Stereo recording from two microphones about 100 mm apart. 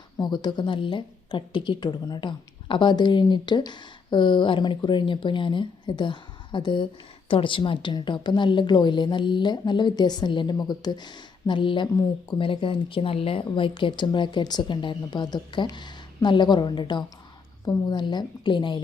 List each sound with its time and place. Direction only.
0.2 s a woman's voice: 45° left (ahead or behind)